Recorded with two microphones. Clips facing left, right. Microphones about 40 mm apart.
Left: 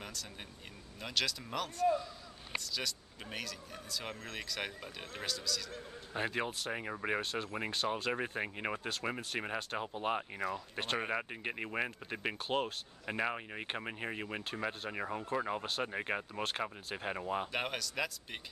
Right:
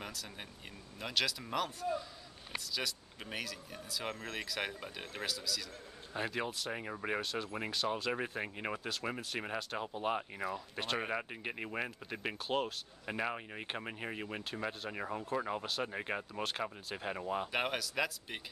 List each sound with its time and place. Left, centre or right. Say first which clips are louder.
0.0 s a sound: right 1 dB; centre
1.0 s speech: right 1 dB; centre
6.1 s speech: left 1 dB; centre
17.5 s speech: right 2 dB; centre